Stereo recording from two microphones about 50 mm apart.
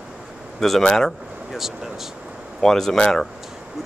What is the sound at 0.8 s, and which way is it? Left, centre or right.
Speech, centre.